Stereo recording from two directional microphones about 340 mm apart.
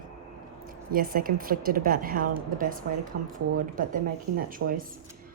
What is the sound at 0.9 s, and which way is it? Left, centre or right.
A woman's voice, right.